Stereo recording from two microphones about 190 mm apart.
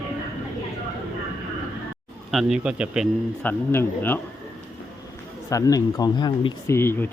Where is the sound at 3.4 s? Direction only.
10° left (ahead or behind).